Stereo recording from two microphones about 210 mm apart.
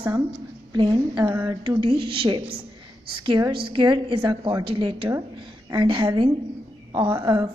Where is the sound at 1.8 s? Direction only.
25° right (ahead or behind).